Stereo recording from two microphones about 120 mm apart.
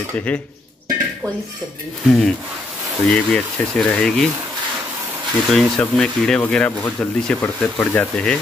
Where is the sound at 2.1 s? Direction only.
5° left (ahead or behind).